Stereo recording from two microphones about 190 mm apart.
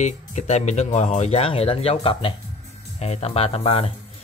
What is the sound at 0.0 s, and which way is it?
Speech, 35° left (ahead or behind).